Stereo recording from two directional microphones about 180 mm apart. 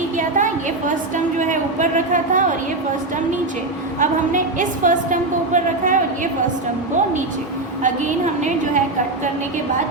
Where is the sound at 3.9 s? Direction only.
45° right (ahead or behind).